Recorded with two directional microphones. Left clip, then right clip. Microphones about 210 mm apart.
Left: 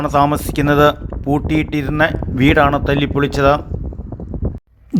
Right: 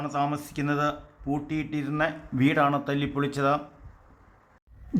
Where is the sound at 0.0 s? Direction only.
40° left (ahead or behind).